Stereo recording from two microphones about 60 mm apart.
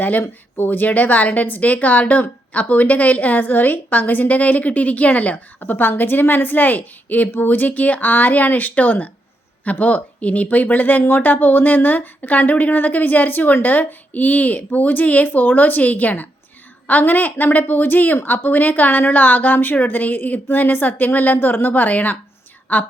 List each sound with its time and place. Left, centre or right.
0.0 s a woman's voice: left